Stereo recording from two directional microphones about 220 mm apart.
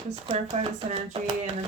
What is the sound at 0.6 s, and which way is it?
Speech, 30° right (ahead or behind).